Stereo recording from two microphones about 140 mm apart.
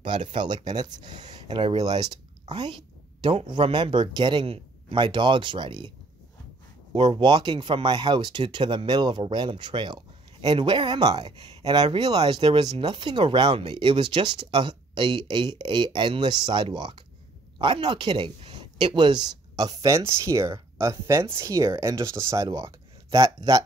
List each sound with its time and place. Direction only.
0.3 s speech: 35° right (ahead or behind)
6.9 s speech: 35° right (ahead or behind)